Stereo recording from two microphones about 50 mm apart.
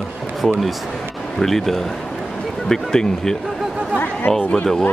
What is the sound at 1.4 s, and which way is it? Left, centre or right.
Speech, centre.